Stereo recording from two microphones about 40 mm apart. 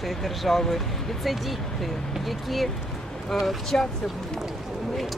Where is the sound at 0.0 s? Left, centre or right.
Centre.